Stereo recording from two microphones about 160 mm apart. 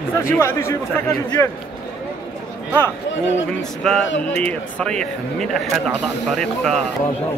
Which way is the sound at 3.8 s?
5° left (ahead or behind).